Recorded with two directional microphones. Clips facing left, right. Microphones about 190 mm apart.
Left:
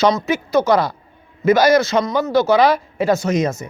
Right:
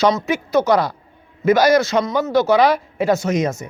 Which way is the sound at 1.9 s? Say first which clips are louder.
Left 1 dB; 5° right (ahead or behind).